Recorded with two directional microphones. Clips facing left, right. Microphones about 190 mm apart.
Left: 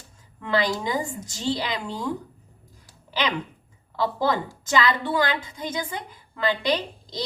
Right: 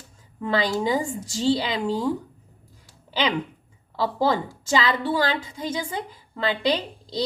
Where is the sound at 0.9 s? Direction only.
30° right (ahead or behind).